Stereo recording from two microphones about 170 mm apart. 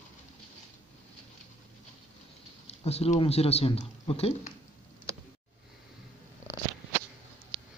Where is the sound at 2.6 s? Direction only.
40° left (ahead or behind).